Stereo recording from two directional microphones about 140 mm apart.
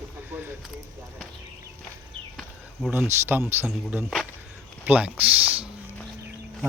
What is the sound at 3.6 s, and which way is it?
A man's voice, 10° right (ahead or behind).